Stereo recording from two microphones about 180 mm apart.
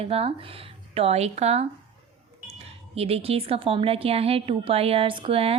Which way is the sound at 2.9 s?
35° right (ahead or behind).